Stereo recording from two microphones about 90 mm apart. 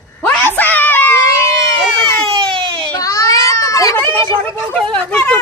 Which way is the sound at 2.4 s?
70° right (ahead or behind).